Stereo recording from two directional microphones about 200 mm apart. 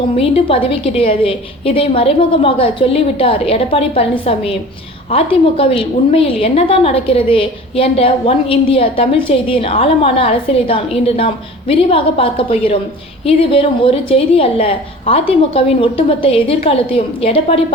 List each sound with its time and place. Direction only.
0.2 s a woman's voice: 30° left (ahead or behind)